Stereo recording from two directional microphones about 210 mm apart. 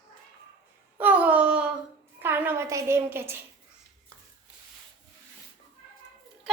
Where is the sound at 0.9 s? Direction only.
10° right (ahead or behind).